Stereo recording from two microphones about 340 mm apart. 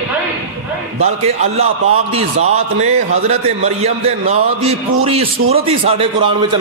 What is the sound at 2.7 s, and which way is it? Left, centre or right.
A man's voice, centre.